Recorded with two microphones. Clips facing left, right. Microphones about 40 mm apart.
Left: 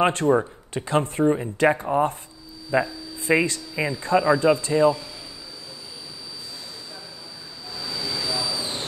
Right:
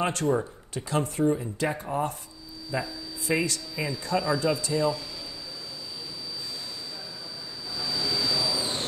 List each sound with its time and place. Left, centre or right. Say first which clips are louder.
0.0 s speech: left 6 dB; left
1.9 s speech: left 7 dB; left
7.7 s a sound: right 1 dB; centre